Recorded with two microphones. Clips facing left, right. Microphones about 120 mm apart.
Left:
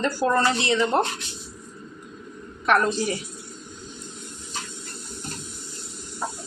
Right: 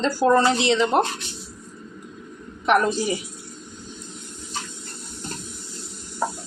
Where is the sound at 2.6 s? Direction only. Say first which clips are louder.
Right 2 dB; 15° right (ahead or behind).